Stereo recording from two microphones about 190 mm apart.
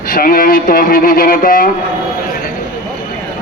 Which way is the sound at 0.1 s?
50° left (ahead or behind).